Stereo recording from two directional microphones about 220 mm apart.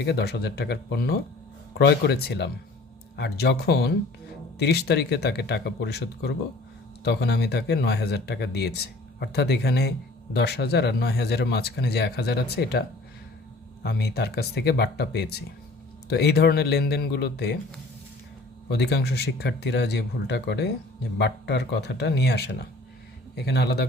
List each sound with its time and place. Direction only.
0.0 s speech: 50° left (ahead or behind)
13.8 s speech: 50° left (ahead or behind)
18.7 s speech: 50° left (ahead or behind)